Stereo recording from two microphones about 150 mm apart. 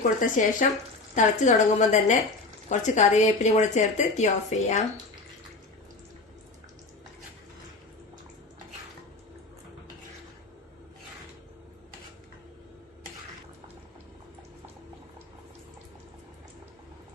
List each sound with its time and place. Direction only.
0.2 s speech: 60° left (ahead or behind)